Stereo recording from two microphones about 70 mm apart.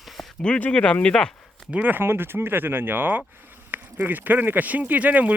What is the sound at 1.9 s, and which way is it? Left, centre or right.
Speech, right.